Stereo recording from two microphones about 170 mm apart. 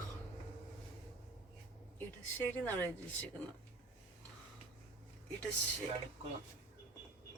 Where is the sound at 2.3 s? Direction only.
10° left (ahead or behind).